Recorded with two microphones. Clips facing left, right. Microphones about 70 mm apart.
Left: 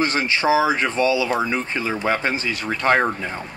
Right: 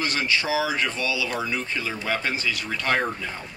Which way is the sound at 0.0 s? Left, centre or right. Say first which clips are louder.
Left 5 dB; left.